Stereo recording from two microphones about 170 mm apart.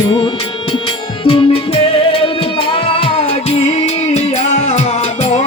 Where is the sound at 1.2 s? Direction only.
30° left (ahead or behind).